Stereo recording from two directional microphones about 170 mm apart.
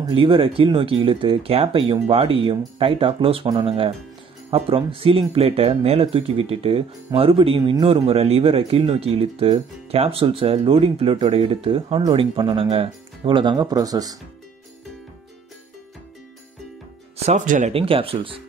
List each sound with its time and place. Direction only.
0.0 s speech: 30° right (ahead or behind)
17.3 s speech: 45° right (ahead or behind)
17.7 s speech: 35° right (ahead or behind)